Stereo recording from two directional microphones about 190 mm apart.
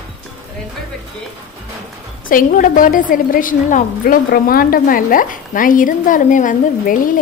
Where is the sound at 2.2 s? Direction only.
45° left (ahead or behind).